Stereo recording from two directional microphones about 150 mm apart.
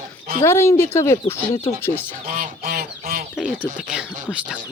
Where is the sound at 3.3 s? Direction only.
5° right (ahead or behind).